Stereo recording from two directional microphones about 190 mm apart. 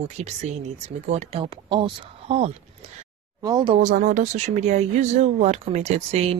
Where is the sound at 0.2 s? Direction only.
35° right (ahead or behind).